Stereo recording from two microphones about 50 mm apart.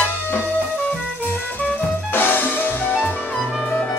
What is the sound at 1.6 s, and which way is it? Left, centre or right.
Music, left.